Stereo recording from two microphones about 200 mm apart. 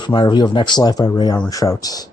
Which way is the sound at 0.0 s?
20° left (ahead or behind).